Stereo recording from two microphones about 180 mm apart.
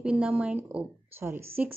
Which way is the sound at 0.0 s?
5° right (ahead or behind).